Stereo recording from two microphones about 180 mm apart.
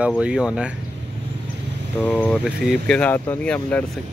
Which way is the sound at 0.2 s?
5° right (ahead or behind).